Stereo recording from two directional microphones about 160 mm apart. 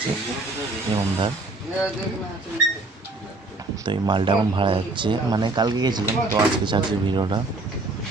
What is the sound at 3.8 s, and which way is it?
Speech, 30° right (ahead or behind).